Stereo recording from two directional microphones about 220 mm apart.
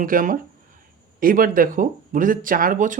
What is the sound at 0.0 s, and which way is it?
Speech, 40° right (ahead or behind).